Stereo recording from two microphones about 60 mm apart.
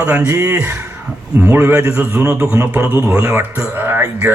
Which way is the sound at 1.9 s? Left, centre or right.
Right.